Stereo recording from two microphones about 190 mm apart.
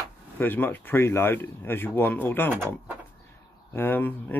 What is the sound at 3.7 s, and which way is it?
Speech, 10° left (ahead or behind).